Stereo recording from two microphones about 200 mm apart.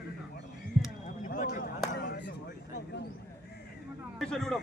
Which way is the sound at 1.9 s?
55° left (ahead or behind).